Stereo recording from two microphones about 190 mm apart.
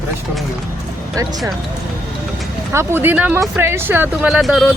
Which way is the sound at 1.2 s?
15° right (ahead or behind).